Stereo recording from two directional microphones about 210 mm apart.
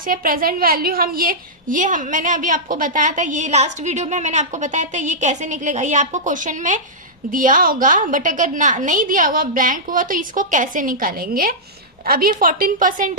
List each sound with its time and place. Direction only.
0.1 s a woman's voice: 40° right (ahead or behind)